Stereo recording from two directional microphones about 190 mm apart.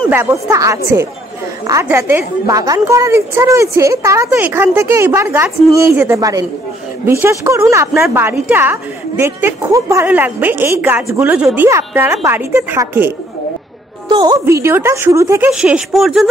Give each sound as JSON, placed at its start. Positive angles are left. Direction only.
{"t": 0.1, "sound": "a woman's voice", "side_deg": -15}
{"t": 14.0, "sound": "a woman's voice", "side_deg": -25}
{"t": 14.4, "sound": "a woman's voice", "side_deg": -15}